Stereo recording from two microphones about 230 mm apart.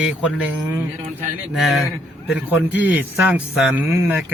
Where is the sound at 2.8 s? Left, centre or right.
Centre.